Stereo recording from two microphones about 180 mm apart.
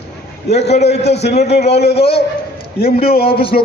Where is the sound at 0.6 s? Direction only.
35° left (ahead or behind).